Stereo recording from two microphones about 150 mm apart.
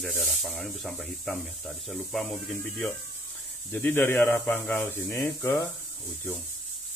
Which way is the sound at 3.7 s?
10° left (ahead or behind).